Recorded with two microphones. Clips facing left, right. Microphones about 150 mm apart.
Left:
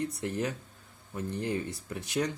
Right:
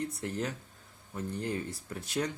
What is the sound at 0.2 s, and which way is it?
Speech, 15° left (ahead or behind).